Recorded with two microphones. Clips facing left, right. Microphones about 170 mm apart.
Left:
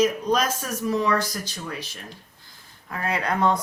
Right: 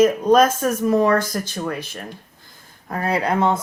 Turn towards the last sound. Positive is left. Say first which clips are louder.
# right 4 dB
turn(degrees=-25)  # may be behind; listen again after turning